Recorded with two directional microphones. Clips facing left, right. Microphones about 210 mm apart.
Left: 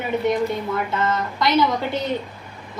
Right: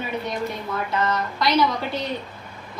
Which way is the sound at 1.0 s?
25° left (ahead or behind).